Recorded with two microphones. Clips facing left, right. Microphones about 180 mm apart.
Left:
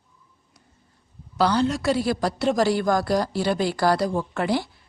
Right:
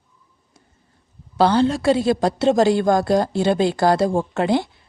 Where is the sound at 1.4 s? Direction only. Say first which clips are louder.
Right 5 dB; 30° right (ahead or behind).